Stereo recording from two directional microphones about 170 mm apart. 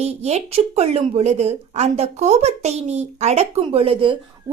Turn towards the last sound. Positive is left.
turn(degrees=-30)  # may be behind; listen again after turning